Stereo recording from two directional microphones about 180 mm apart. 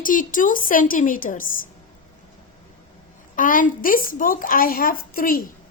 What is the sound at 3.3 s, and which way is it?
A woman's voice, 50° left (ahead or behind).